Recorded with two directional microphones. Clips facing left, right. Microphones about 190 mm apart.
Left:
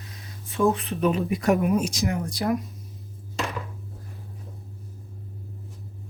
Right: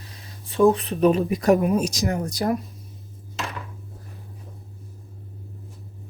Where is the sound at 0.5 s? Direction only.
35° right (ahead or behind).